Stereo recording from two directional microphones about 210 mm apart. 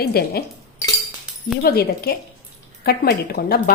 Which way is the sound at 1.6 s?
45° left (ahead or behind).